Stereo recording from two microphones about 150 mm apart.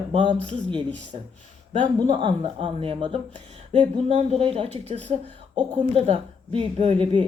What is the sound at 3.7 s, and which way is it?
Speech, 50° right (ahead or behind).